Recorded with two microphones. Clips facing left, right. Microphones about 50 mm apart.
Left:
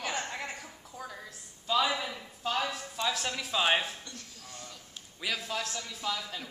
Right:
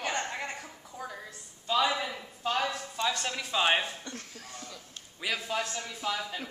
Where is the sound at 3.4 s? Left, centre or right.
Centre.